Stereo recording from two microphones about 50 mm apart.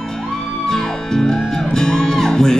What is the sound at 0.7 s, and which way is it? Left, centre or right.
Music, centre.